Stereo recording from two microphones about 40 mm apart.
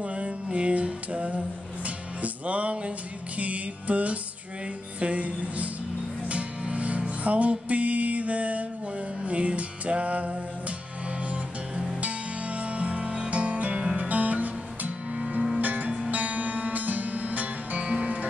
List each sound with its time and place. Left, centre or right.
0.0 s music: right